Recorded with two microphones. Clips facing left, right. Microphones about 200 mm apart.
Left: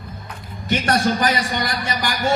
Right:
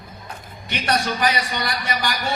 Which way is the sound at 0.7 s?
45° left (ahead or behind).